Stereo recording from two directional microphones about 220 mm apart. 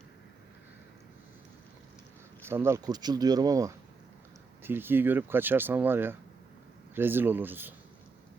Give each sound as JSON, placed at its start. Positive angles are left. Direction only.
{"t": 2.5, "sound": "speech", "side_deg": -10}